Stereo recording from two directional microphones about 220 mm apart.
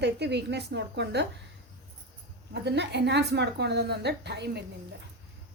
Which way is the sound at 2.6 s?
50° right (ahead or behind).